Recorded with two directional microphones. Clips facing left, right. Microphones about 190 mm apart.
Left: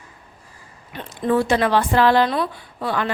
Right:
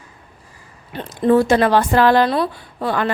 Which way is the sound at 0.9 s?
35° right (ahead or behind).